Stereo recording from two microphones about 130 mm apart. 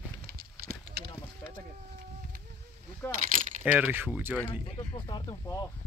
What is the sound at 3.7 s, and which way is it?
Speech, 15° right (ahead or behind).